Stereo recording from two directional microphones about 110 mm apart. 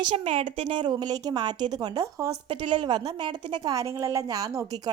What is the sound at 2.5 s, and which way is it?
A woman's voice, 50° right (ahead or behind).